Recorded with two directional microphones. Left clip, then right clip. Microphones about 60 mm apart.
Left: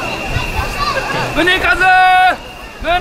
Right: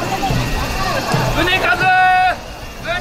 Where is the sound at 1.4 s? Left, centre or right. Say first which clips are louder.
Left 4 dB; left.